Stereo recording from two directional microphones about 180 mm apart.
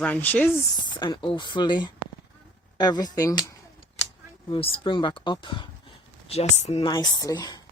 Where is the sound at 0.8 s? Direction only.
25° left (ahead or behind).